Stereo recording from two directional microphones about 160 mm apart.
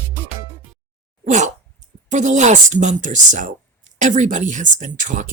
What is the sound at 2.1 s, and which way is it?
Speech, 50° right (ahead or behind).